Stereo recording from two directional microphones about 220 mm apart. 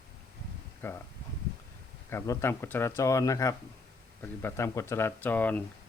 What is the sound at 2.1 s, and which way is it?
Speech, 10° left (ahead or behind).